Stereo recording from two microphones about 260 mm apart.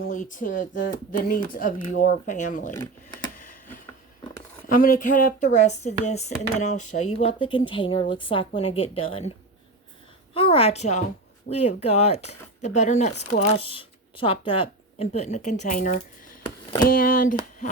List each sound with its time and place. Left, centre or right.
0.0 s speech: left
2.7 s speech: centre
4.7 s speech: left
10.3 s speech: left